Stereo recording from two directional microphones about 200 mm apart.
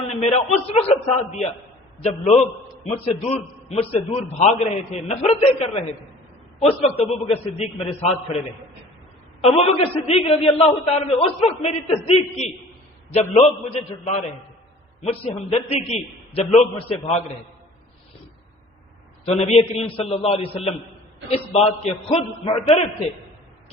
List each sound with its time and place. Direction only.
0.2 s a man's voice: 30° left (ahead or behind)
9.4 s a man's voice: 30° left (ahead or behind)
15.0 s a man's voice: 30° left (ahead or behind)
19.2 s a man's voice: 30° left (ahead or behind)